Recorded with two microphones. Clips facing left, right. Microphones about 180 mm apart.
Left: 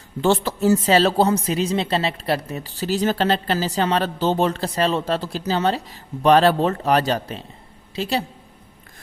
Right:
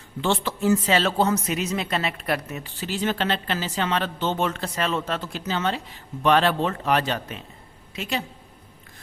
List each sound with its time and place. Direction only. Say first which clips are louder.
0.2 s a woman's voice: left 5 dB; 40° left (ahead or behind)